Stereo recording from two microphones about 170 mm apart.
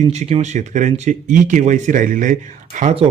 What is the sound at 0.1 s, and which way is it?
Speech, 40° right (ahead or behind).